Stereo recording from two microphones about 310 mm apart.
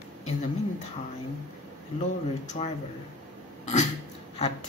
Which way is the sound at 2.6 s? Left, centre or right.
Centre.